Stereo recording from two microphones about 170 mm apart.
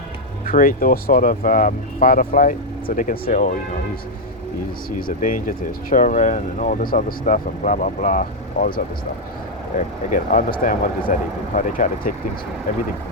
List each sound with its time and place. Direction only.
0.4 s speech: 55° left (ahead or behind)
4.9 s speech: 55° left (ahead or behind)